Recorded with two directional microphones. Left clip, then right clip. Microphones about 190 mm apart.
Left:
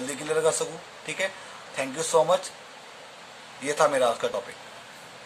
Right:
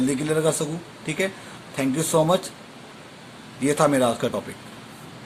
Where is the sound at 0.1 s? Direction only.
25° right (ahead or behind).